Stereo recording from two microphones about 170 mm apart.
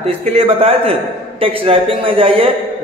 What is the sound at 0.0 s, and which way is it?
A man's voice, 35° right (ahead or behind).